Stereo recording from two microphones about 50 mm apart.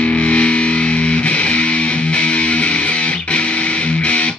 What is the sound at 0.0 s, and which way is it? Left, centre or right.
Music, left.